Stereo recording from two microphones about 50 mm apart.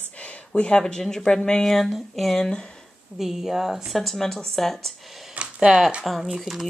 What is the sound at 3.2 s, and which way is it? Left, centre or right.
Speech, centre.